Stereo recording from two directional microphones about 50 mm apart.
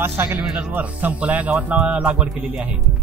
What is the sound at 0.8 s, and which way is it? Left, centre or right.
Speech, right.